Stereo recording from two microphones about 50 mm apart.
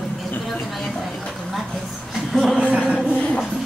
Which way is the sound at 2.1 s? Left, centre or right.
Centre.